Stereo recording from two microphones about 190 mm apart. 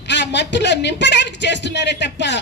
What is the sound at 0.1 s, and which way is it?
A woman's voice, 65° left (ahead or behind).